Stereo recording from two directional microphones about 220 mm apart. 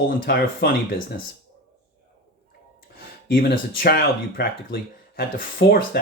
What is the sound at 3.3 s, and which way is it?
Speech, 45° left (ahead or behind).